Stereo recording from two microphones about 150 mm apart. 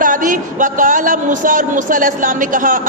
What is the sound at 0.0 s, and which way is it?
A woman's voice, 65° right (ahead or behind).